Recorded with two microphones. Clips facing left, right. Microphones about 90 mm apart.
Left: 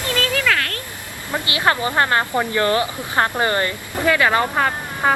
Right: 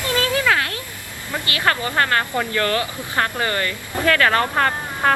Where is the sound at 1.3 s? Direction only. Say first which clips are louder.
Left 2 dB; 20° left (ahead or behind).